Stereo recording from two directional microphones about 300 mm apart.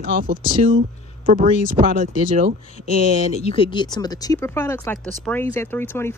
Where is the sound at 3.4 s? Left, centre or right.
Centre.